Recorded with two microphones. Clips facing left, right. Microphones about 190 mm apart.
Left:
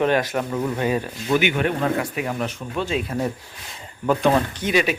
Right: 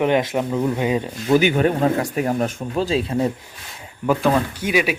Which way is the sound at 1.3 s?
35° right (ahead or behind).